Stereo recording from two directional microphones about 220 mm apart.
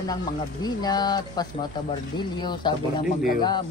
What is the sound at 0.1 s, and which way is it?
Speech, 20° left (ahead or behind).